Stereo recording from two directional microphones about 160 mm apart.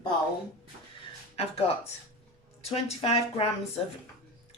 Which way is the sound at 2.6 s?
40° left (ahead or behind).